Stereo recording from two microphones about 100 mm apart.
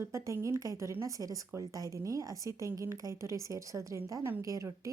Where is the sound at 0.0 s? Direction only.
30° right (ahead or behind).